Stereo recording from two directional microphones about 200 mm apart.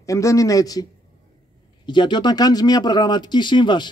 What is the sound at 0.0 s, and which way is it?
Speech, 15° left (ahead or behind).